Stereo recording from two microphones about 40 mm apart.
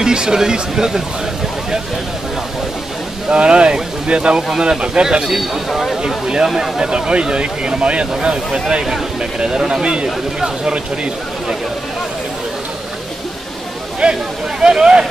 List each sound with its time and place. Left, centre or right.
0.0 s speech: centre
3.3 s speech: right
5.2 s a man's voice: centre
6.0 s speech: centre
6.9 s speech: right
14.0 s speech: centre